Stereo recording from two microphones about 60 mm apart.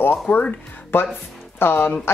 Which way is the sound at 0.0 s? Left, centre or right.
Left.